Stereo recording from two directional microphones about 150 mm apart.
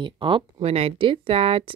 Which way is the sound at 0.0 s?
35° right (ahead or behind).